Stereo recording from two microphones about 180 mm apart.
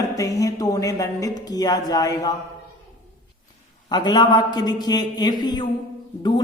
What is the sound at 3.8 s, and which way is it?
Speech, 25° left (ahead or behind).